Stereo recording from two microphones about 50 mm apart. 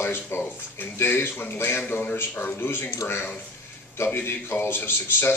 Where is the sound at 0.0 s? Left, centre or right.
Left.